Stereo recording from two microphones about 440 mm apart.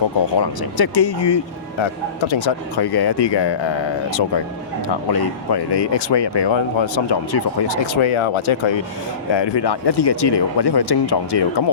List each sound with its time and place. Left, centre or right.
0.3 s speech: left
1.8 s speech: left
4.9 s speech: left
9.3 s speech: left